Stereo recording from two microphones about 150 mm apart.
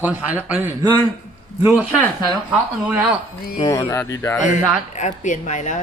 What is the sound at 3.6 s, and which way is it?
Speech, 20° left (ahead or behind).